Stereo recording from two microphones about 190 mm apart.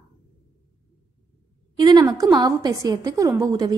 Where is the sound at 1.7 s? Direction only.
20° right (ahead or behind).